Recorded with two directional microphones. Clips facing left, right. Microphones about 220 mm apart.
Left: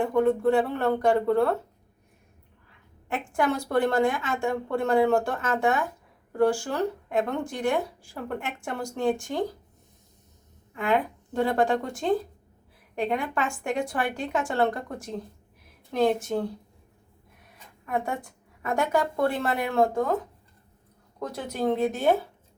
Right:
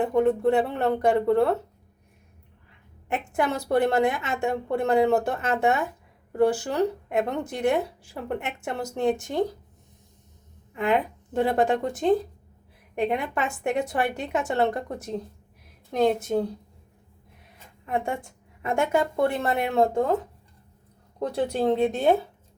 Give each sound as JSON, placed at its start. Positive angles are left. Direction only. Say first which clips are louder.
{"t": 0.0, "sound": "a woman's voice", "louder": "right 1 dB", "side_deg": -20}
{"t": 3.1, "sound": "a woman's voice", "louder": "even", "side_deg": -20}
{"t": 11.4, "sound": "a woman's voice", "louder": "right 1 dB", "side_deg": -20}
{"t": 17.8, "sound": "a woman's voice", "louder": "right 1 dB", "side_deg": -25}
{"t": 21.2, "sound": "a woman's voice", "louder": "right 5 dB", "side_deg": -30}